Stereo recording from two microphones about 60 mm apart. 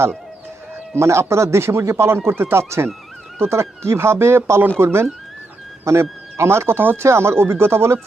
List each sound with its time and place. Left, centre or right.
0.9 s speech: right